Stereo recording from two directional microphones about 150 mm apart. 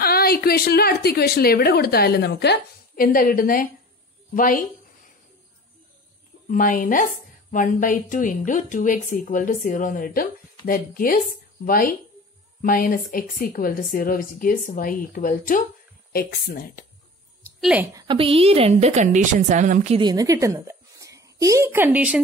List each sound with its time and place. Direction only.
0.0 s a woman's voice: 90° left; by 4.6 s 65° left (ahead or behind)
6.5 s a woman's voice: 65° left (ahead or behind)
16.1 s speech: 90° left
17.6 s a woman's voice: 5° right (ahead or behind)
17.9 s a woman's voice: 35° right (ahead or behind); by 20.0 s 55° right (ahead or behind)
20.0 s a woman's voice: 25° right (ahead or behind); by 22.2 s 10° right (ahead or behind)